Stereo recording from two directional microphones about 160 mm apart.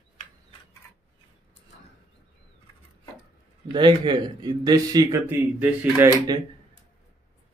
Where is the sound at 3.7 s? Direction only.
30° right (ahead or behind).